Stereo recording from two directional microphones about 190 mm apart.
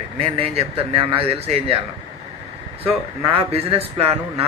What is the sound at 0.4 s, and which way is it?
A man's voice, 30° right (ahead or behind).